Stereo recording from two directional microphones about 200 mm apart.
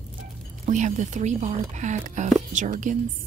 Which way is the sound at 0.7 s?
40° right (ahead or behind).